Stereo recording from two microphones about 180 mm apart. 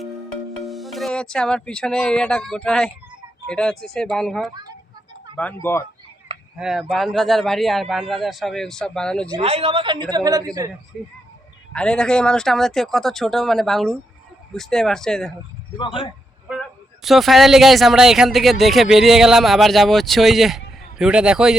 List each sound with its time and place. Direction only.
0.6 s speech: centre (ahead or behind)
5.6 s speech: 10° left (ahead or behind)
6.6 s speech: centre (ahead or behind)
9.4 s a woman's voice: 35° right (ahead or behind)
11.7 s speech: 5° left (ahead or behind)
16.5 s speech: centre (ahead or behind)